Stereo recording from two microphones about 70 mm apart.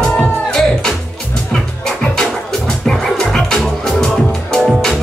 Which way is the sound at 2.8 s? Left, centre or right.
Centre.